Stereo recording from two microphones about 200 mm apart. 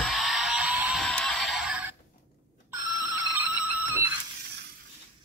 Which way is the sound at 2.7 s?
10° right (ahead or behind).